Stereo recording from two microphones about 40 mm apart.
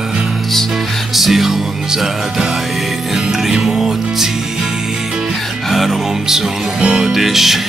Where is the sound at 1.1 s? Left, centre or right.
Centre.